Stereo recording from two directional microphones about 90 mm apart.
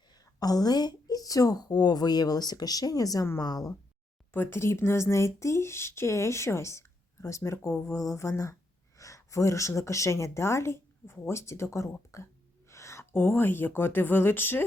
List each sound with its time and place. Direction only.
0.3 s speech: 45° left (ahead or behind)
4.3 s speech: 25° left (ahead or behind)